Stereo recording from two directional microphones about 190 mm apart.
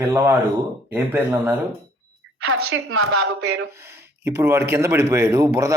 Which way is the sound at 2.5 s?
90° right.